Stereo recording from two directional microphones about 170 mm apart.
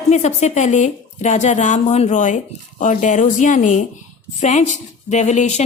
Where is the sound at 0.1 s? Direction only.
40° left (ahead or behind).